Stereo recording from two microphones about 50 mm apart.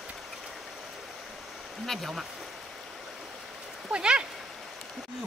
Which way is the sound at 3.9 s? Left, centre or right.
Centre.